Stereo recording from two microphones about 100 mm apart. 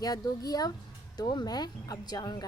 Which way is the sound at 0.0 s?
40° left (ahead or behind).